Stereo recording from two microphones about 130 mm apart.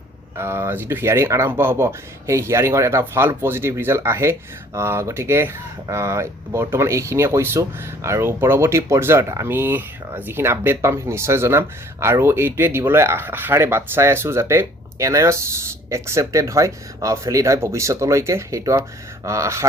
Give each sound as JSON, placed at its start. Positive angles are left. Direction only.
{"t": 0.3, "sound": "speech", "side_deg": -20}